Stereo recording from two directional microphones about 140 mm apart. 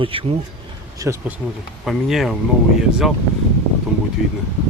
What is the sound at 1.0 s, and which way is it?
Speech, 25° right (ahead or behind).